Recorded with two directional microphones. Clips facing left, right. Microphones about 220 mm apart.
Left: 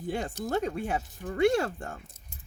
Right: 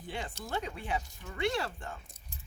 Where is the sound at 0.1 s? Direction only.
45° left (ahead or behind).